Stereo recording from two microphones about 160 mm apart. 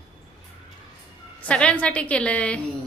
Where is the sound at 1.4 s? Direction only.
5° left (ahead or behind).